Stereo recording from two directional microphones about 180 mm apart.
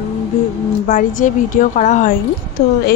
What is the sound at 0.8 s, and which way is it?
Speech, 45° left (ahead or behind).